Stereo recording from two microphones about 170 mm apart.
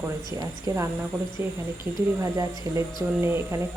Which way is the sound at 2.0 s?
20° right (ahead or behind).